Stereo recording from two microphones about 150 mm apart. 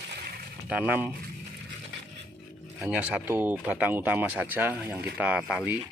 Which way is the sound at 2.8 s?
5° right (ahead or behind).